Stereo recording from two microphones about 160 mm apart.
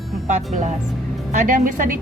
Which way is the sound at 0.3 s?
50° right (ahead or behind).